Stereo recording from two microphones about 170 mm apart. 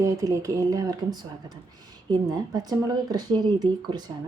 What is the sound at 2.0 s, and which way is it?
A woman's voice, 25° right (ahead or behind).